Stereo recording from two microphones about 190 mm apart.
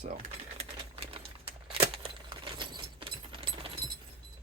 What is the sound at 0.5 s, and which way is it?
Typewriter, 30° right (ahead or behind).